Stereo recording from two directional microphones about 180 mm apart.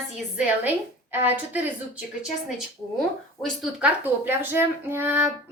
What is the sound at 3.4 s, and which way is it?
A woman's voice, 10° right (ahead or behind).